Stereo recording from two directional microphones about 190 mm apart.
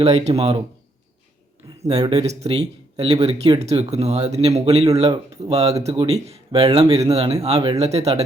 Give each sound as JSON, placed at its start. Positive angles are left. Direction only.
{"t": 0.0, "sound": "speech", "side_deg": -35}
{"t": 1.9, "sound": "speech", "side_deg": -20}
{"t": 2.2, "sound": "speech", "side_deg": -35}